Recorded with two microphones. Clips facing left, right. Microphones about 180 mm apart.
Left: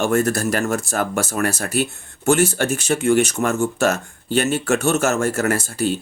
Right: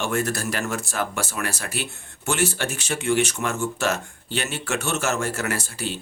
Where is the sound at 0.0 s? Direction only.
45° left (ahead or behind).